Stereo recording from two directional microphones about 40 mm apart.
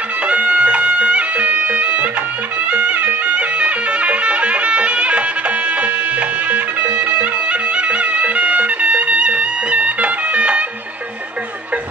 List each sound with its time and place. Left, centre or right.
0.3 s music: right